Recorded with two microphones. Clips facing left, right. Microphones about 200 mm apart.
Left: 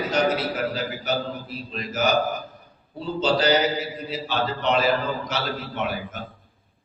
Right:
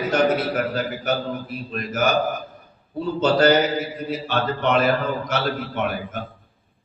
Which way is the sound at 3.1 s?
50° right (ahead or behind).